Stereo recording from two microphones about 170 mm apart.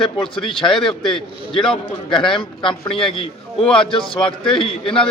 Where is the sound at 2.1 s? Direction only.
30° left (ahead or behind).